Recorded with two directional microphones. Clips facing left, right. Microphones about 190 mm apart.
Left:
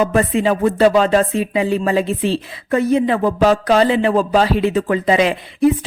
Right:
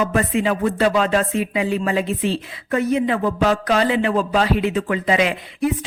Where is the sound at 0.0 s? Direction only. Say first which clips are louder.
Left 4 dB; 30° left (ahead or behind).